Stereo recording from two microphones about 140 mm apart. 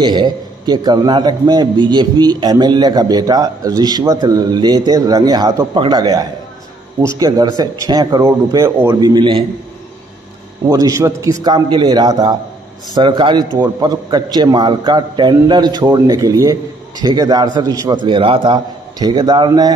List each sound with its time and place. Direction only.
0.0 s a man's voice: 30° right (ahead or behind)
9.1 s a man's voice: 35° right (ahead or behind)
10.7 s a man's voice: 25° right (ahead or behind)
11.4 s a man's voice: 30° right (ahead or behind)